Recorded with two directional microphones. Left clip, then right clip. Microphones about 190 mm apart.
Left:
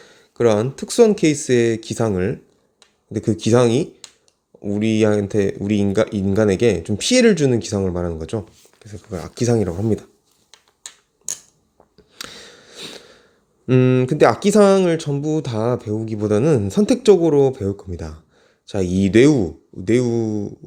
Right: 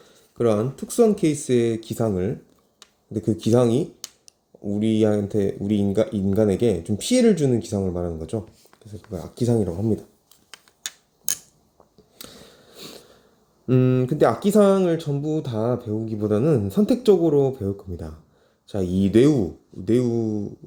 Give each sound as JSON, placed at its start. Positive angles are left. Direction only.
{"t": 0.0, "sound": "speech", "side_deg": 15}
{"t": 12.1, "sound": "sniff", "side_deg": 15}
{"t": 13.7, "sound": "speech", "side_deg": 15}